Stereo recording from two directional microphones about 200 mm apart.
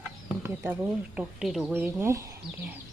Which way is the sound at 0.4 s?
10° right (ahead or behind).